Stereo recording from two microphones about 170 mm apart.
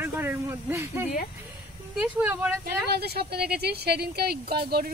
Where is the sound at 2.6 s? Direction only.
70° right (ahead or behind).